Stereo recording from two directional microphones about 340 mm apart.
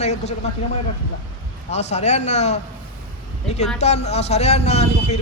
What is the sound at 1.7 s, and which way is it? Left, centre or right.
Speech, centre.